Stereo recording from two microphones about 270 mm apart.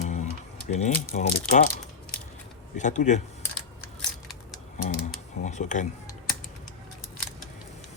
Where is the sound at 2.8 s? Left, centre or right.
Left.